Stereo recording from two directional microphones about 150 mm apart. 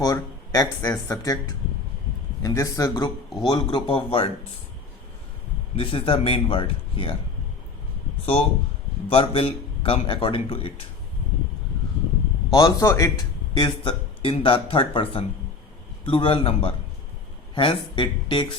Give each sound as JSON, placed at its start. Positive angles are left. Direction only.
{"t": 0.0, "sound": "speech", "side_deg": 25}
{"t": 5.7, "sound": "speech", "side_deg": 35}
{"t": 8.2, "sound": "speech", "side_deg": 40}
{"t": 12.5, "sound": "speech", "side_deg": 20}
{"t": 13.5, "sound": "speech", "side_deg": 30}